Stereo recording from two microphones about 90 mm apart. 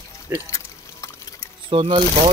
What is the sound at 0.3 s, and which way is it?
Speech, 30° right (ahead or behind).